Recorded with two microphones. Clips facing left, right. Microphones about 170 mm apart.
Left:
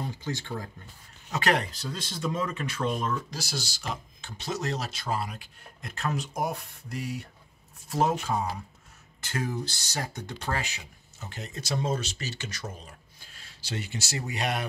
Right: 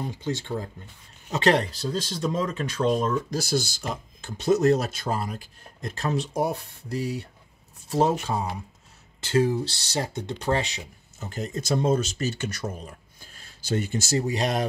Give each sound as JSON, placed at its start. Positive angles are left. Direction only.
{"t": 1.3, "sound": "speech", "side_deg": -30}
{"t": 3.3, "sound": "speech", "side_deg": -50}
{"t": 11.1, "sound": "speech", "side_deg": -45}